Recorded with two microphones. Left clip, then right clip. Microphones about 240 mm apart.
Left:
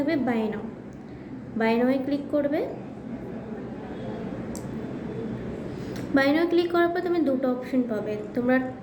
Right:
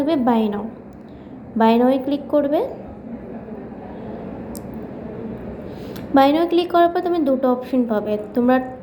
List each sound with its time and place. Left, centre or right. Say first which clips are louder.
0.0 s a woman's voice: right 7 dB; right
1.5 s a woman's voice: right 8 dB; centre
6.1 s a woman's voice: right 7 dB; centre